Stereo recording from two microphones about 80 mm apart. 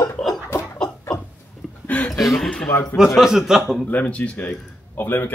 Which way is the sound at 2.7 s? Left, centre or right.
Left.